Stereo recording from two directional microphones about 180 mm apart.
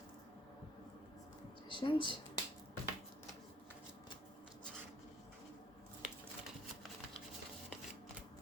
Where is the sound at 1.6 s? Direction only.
25° left (ahead or behind).